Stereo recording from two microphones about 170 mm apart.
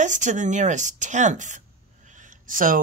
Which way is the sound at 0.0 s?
45° right (ahead or behind).